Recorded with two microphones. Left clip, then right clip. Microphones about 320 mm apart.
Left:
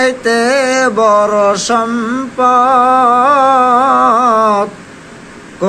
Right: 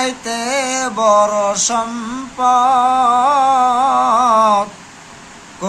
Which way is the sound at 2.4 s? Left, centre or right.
Right.